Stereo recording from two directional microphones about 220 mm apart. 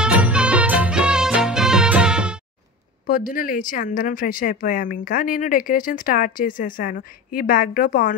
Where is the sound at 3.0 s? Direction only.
40° left (ahead or behind).